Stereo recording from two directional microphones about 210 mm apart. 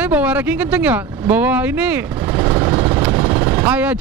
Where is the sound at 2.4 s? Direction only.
20° right (ahead or behind).